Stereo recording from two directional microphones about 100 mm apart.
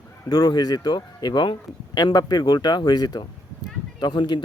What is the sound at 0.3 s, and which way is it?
Speech, 40° left (ahead or behind).